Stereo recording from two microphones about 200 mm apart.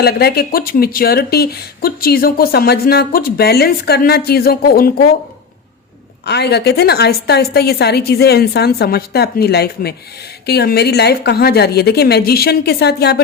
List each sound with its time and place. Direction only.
0.0 s speech: 50° left (ahead or behind)
6.2 s speech: 55° left (ahead or behind)